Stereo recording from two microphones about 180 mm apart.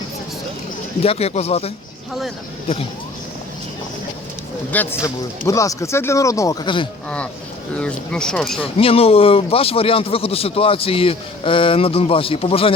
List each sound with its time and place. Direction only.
1.0 s speech: 35° left (ahead or behind)
4.7 s speech: 10° left (ahead or behind)
7.8 s speech: 5° left (ahead or behind)
8.6 s speech: 30° left (ahead or behind)